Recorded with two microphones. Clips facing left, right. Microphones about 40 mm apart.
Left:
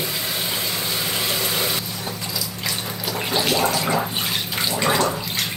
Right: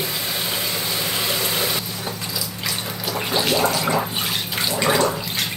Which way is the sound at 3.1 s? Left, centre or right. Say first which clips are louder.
Right 1 dB; centre.